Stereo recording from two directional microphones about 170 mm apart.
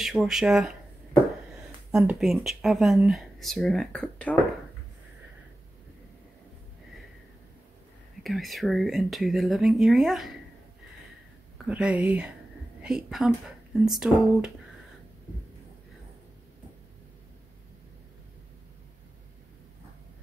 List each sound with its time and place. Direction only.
0.0 s speech: centre (ahead or behind)
1.9 s speech: 5° right (ahead or behind)
8.2 s speech: centre (ahead or behind)
11.6 s speech: 10° right (ahead or behind)